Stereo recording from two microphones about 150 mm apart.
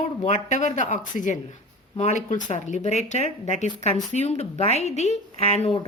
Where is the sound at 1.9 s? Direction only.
45° left (ahead or behind).